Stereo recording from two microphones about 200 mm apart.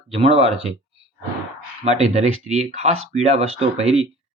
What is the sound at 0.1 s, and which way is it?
Speech, 30° right (ahead or behind).